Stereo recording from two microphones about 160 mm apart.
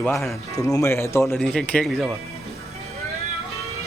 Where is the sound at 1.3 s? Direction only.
5° left (ahead or behind).